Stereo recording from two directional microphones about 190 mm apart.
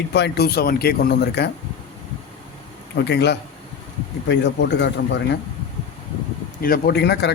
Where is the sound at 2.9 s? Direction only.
60° left (ahead or behind).